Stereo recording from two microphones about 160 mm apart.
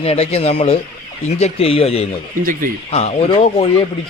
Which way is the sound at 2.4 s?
55° right (ahead or behind).